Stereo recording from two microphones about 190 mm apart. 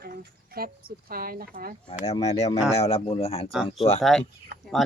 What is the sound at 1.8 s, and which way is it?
Speech, 35° left (ahead or behind).